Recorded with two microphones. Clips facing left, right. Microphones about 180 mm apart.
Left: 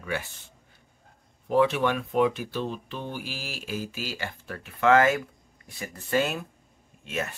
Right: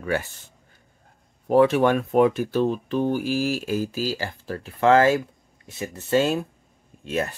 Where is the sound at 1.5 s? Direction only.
45° right (ahead or behind).